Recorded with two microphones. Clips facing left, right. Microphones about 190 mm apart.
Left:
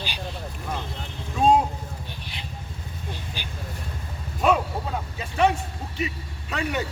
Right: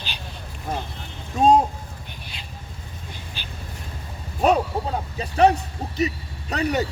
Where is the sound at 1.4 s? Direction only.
40° right (ahead or behind).